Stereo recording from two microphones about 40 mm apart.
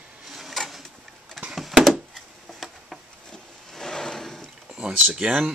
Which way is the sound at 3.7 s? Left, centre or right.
Centre.